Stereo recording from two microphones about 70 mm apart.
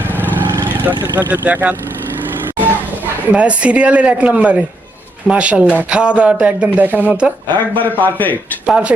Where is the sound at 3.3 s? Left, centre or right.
Centre.